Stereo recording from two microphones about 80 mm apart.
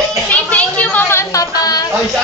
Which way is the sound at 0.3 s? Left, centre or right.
Centre.